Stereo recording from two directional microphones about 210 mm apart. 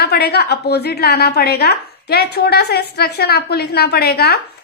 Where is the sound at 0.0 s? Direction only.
50° left (ahead or behind).